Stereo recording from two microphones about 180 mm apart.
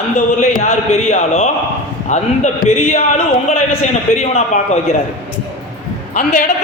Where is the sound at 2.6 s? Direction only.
35° left (ahead or behind).